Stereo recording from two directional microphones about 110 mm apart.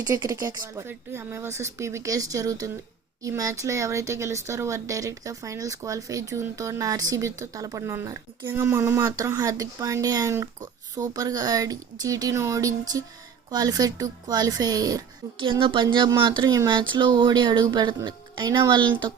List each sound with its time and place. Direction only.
0.0 s speech: 35° right (ahead or behind)
0.9 s speech: 20° right (ahead or behind)
8.4 s speech: 20° right (ahead or behind)
15.4 s speech: 50° right (ahead or behind)